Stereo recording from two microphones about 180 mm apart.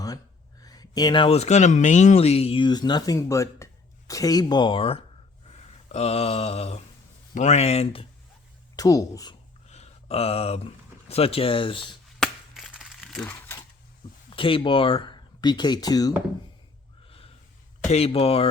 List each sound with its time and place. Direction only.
0.6 s speech: 20° left (ahead or behind)
5.9 s a sound: 35° left (ahead or behind)
8.7 s speech: 20° left (ahead or behind)
9.6 s a sound: 35° left (ahead or behind)
12.2 s crumpling: centre (ahead or behind)
14.3 s speech: 30° left (ahead or behind)
17.7 s speech: 35° left (ahead or behind)